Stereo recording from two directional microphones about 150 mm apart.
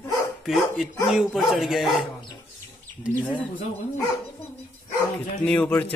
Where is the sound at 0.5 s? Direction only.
Centre (ahead or behind).